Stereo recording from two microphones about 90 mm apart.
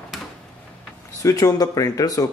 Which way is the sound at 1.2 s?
40° left (ahead or behind).